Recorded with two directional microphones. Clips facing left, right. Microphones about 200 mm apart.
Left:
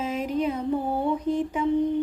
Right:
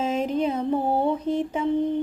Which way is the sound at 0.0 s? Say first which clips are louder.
Right 2 dB; 25° right (ahead or behind).